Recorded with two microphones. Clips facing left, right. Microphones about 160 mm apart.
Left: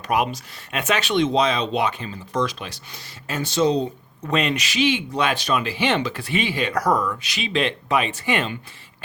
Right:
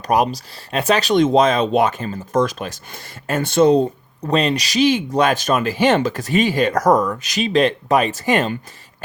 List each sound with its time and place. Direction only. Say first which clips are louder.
0.1 s speech: right 5 dB; 35° right (ahead or behind)
4.2 s speech: right 4 dB; 35° right (ahead or behind)